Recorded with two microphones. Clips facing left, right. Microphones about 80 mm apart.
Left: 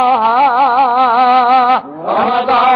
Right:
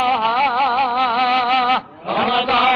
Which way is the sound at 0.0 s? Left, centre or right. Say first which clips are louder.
Left 7 dB; left.